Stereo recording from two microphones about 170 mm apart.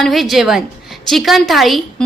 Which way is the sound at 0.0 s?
Centre (ahead or behind).